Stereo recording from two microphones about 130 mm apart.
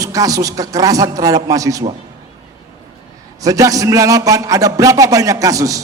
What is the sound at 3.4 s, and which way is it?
A man's voice, 25° right (ahead or behind).